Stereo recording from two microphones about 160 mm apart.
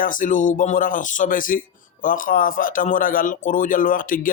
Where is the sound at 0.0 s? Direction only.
55° left (ahead or behind).